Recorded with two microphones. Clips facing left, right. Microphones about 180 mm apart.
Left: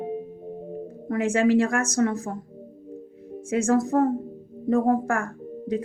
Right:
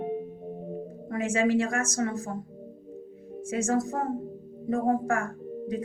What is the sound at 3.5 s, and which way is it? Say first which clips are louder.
A woman's voice: left 6 dB; 65° left (ahead or behind).